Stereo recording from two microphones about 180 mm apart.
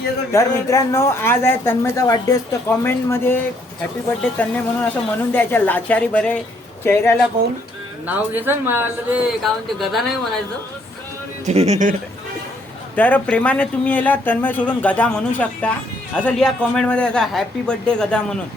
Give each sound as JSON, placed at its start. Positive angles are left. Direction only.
{"t": 0.3, "sound": "speech", "side_deg": 15}
{"t": 8.0, "sound": "speech", "side_deg": -10}
{"t": 9.4, "sound": "a man's voice", "side_deg": 0}
{"t": 11.4, "sound": "speech", "side_deg": -35}
{"t": 13.0, "sound": "a man's voice", "side_deg": 10}